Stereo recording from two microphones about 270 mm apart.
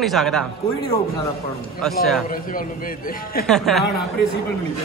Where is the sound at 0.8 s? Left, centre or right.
Centre.